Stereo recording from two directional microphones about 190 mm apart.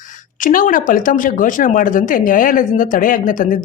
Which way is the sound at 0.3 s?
45° left (ahead or behind).